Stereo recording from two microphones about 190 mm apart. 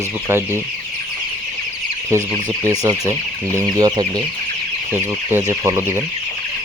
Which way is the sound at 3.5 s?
15° right (ahead or behind).